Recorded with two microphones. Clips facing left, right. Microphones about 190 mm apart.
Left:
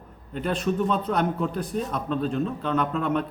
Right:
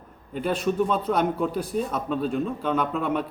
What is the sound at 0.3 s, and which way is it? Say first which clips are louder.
Speech: right 1 dB; 5° right (ahead or behind).